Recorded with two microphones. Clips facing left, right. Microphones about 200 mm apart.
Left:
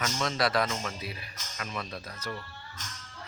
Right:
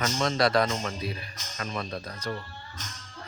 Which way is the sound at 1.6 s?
40° right (ahead or behind).